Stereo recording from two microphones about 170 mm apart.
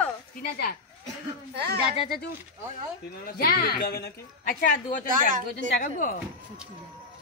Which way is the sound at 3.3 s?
60° left (ahead or behind).